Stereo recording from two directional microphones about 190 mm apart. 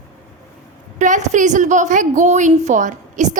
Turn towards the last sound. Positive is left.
turn(degrees=-40)  # may be behind; listen again after turning